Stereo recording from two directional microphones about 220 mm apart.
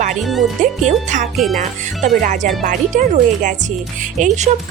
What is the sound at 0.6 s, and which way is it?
Speech, 35° right (ahead or behind).